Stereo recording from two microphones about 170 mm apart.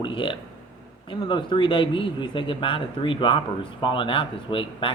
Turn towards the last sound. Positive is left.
turn(degrees=30)  # may be behind; listen again after turning